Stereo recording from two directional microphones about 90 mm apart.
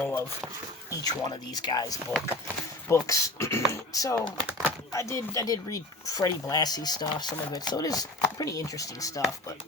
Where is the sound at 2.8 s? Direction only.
35° left (ahead or behind).